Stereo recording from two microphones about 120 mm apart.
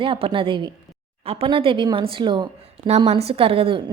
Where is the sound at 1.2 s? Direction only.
55° right (ahead or behind).